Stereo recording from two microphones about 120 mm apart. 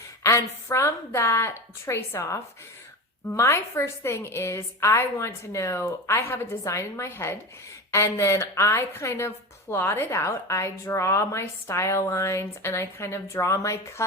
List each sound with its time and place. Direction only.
0.2 s a woman's voice: 20° left (ahead or behind)